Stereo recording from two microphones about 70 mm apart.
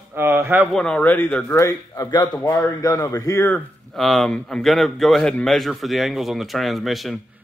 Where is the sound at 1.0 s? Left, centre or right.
Left.